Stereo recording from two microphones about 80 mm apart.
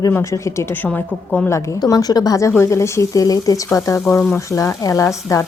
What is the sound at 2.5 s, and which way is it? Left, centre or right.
A woman's voice, left.